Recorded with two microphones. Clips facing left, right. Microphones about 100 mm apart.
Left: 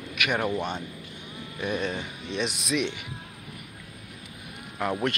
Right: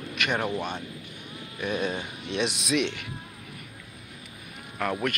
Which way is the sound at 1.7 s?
5° right (ahead or behind).